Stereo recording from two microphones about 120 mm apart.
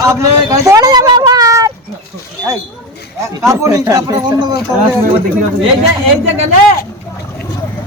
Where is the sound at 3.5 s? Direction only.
25° right (ahead or behind).